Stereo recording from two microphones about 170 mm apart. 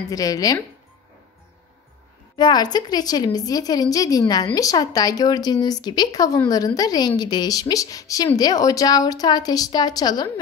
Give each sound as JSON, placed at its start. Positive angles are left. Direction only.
{"t": 0.1, "sound": "speech", "side_deg": 20}
{"t": 2.3, "sound": "speech", "side_deg": 25}